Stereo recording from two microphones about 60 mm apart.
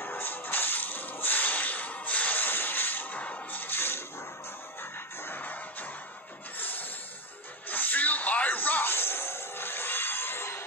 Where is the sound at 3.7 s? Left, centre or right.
Left.